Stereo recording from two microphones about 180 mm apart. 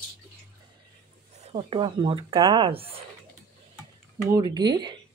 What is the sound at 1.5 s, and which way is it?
Speech, 25° right (ahead or behind).